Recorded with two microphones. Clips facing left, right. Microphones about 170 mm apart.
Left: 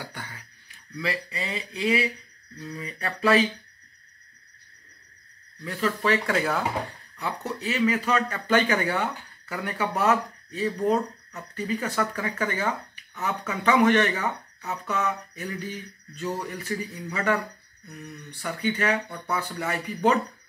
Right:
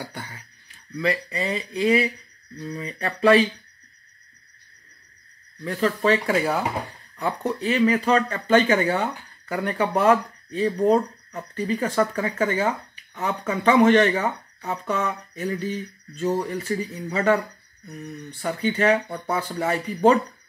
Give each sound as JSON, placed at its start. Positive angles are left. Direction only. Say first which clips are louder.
{"t": 0.9, "sound": "speech", "louder": "right 6 dB", "side_deg": -50}
{"t": 5.6, "sound": "speech", "louder": "right 4 dB", "side_deg": -40}
{"t": 6.2, "sound": "speech", "louder": "right 3 dB", "side_deg": -15}
{"t": 7.2, "sound": "speech", "louder": "right 6 dB", "side_deg": -45}
{"t": 7.7, "sound": "speech", "louder": "right 4 dB", "side_deg": -35}
{"t": 9.5, "sound": "speech", "louder": "right 5 dB", "side_deg": -40}
{"t": 18.7, "sound": "speech", "louder": "right 5 dB", "side_deg": -30}